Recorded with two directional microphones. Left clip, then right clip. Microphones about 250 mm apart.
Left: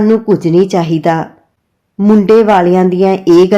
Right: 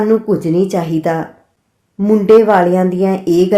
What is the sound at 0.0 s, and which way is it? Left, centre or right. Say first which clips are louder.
Speech: left 3 dB; left.